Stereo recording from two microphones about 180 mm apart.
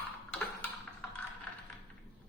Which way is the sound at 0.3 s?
5° left (ahead or behind).